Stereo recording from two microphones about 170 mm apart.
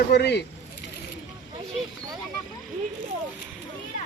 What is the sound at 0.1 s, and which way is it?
Speech, 80° left.